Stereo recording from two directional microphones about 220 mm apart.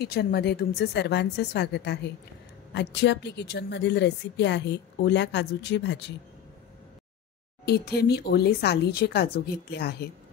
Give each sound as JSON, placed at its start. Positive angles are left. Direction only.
{"t": 0.0, "sound": "speech", "side_deg": 45}
{"t": 7.6, "sound": "speech", "side_deg": 45}